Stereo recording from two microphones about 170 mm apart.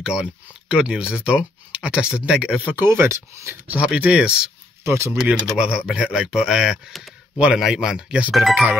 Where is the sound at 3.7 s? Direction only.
5° right (ahead or behind).